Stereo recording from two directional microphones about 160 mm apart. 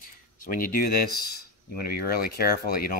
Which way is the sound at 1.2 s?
75° left (ahead or behind).